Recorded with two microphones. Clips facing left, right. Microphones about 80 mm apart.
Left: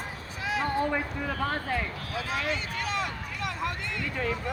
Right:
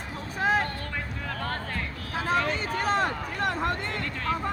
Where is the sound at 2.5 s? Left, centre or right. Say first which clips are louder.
Right 5 dB; right.